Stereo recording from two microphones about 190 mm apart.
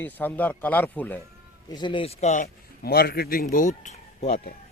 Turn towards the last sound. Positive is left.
turn(degrees=40)  # may be behind; listen again after turning